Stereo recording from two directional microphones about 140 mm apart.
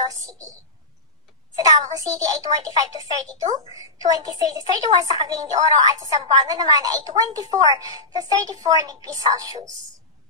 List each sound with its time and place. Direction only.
0.0 s a woman's voice: 25° right (ahead or behind)
1.6 s a child's voice: 25° right (ahead or behind)